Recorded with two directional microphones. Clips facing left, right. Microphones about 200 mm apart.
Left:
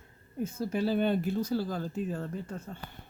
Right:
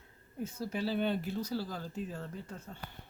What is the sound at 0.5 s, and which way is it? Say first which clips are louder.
Speech: left 5 dB; 45° left (ahead or behind).